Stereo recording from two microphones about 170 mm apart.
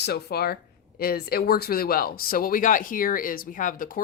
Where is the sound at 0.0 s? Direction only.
70° left (ahead or behind).